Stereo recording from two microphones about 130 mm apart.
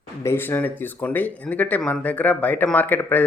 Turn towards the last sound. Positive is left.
turn(degrees=15)  # may be behind; listen again after turning